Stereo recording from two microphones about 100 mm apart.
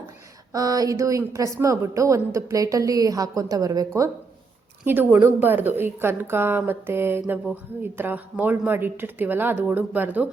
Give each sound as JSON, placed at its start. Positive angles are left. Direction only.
{"t": 0.5, "sound": "a woman's voice", "side_deg": -35}
{"t": 4.9, "sound": "a woman's voice", "side_deg": -20}